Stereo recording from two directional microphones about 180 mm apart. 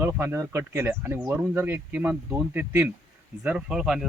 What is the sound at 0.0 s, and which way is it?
Speech, 15° right (ahead or behind).